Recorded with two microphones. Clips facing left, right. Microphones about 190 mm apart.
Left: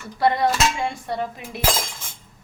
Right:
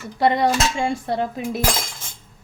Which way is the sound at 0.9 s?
30° right (ahead or behind).